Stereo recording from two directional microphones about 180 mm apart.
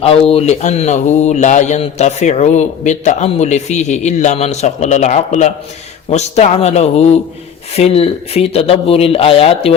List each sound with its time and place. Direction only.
0.0 s speech: 35° left (ahead or behind)